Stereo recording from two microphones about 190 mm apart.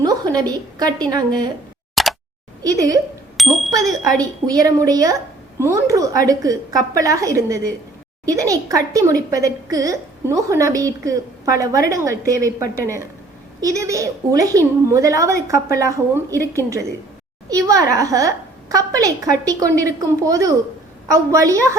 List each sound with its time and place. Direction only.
0.0 s a woman's voice: 20° right (ahead or behind)
2.0 s a sound: centre (ahead or behind)
2.6 s a woman's voice: 20° right (ahead or behind)
3.3 s speech: centre (ahead or behind)
3.7 s a woman's voice: 20° right (ahead or behind)
17.5 s a woman's voice: 20° right (ahead or behind)